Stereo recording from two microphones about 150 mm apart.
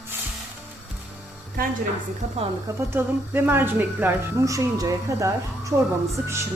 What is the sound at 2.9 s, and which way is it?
A woman's voice, 15° right (ahead or behind).